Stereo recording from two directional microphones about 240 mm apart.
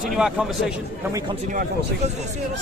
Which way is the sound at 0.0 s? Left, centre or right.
Centre.